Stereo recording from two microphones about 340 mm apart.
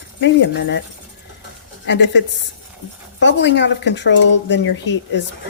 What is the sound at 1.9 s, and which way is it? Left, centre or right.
Speech, left.